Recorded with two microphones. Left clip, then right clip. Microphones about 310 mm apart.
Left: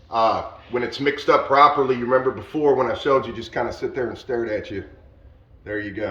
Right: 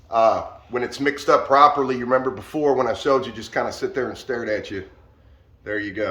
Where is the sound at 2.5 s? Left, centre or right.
Centre.